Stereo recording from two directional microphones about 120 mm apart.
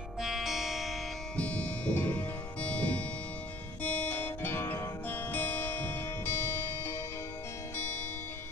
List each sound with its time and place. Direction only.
0.2 s music: centre (ahead or behind)
1.3 s music: 10° left (ahead or behind)